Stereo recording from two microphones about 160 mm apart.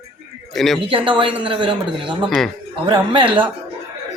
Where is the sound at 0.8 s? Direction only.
35° right (ahead or behind).